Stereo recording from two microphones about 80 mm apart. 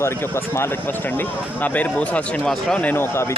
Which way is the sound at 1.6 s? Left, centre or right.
Centre.